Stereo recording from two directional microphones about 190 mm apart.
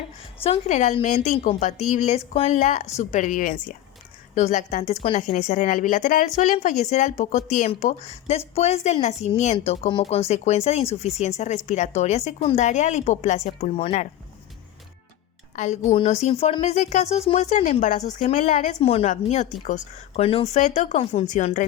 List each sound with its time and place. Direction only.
0.4 s a woman's voice: 40° left (ahead or behind)
15.5 s a woman's voice: 40° left (ahead or behind)